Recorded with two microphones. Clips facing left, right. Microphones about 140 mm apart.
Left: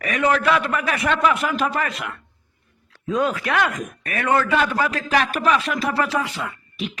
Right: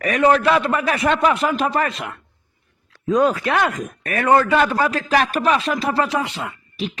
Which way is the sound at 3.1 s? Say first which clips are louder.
Right 4 dB; 40° right (ahead or behind).